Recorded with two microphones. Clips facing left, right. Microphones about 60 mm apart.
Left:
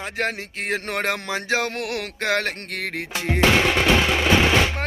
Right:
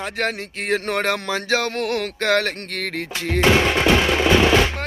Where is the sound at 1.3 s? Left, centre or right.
Centre.